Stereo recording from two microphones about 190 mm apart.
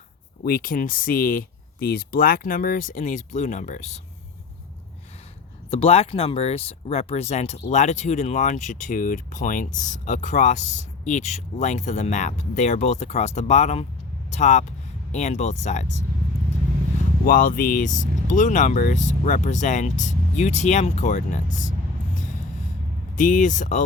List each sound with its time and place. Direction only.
0.4 s speech: 50° left (ahead or behind)
5.7 s speech: 30° left (ahead or behind)
17.2 s speech: 45° left (ahead or behind)
23.1 s speech: 45° left (ahead or behind)